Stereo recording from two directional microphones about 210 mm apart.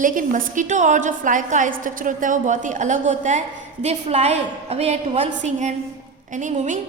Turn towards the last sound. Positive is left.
turn(degrees=-35)  # may be behind; listen again after turning